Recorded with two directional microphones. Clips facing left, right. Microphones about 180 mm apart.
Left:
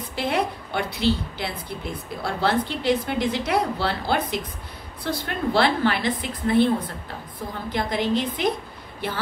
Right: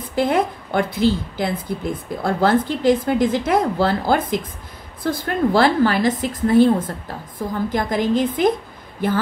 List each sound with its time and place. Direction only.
0.1 s a woman's voice: 50° right (ahead or behind)